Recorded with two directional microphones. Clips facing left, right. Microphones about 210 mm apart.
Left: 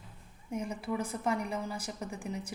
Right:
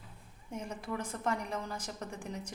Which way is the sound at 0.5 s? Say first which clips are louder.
Left 4 dB; 10° left (ahead or behind).